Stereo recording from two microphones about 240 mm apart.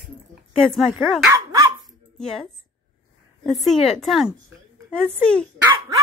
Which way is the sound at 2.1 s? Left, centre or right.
Centre.